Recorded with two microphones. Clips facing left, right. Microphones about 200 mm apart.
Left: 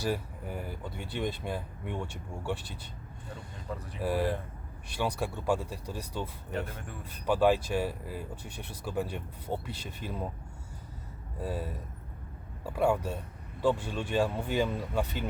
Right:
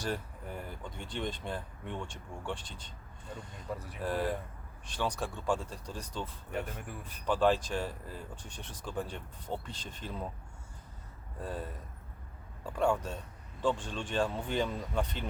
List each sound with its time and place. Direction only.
0.0 s speech: 10° left (ahead or behind)
4.0 s speech: 10° left (ahead or behind)
6.5 s speech: 10° right (ahead or behind)
7.0 s speech: 10° left (ahead or behind)
11.3 s speech: 10° left (ahead or behind)